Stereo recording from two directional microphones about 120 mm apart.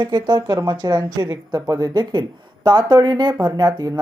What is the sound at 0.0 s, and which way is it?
A man's voice, 35° right (ahead or behind).